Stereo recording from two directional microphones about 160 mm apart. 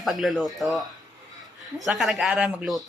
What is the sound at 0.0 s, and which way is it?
Speech, centre (ahead or behind).